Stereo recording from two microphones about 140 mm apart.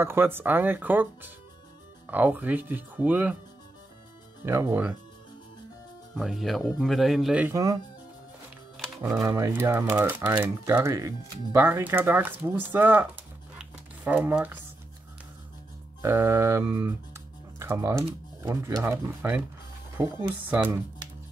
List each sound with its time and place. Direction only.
0.0 s speech: 15° right (ahead or behind)
4.5 s speech: 15° right (ahead or behind)
6.1 s speech: centre (ahead or behind)
7.4 s speech: 20° right (ahead or behind)
8.7 s typing: centre (ahead or behind)
9.0 s speech: 25° right (ahead or behind)
13.6 s a sound: 10° right (ahead or behind)
16.0 s speech: 20° right (ahead or behind)
20.2 s speech: 10° right (ahead or behind)